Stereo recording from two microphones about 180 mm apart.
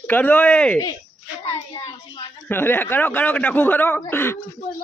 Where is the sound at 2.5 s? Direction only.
10° left (ahead or behind).